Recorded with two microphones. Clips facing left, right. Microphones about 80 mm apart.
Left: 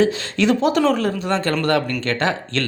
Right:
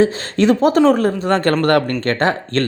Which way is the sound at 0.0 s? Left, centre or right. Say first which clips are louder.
Right 3 dB; right.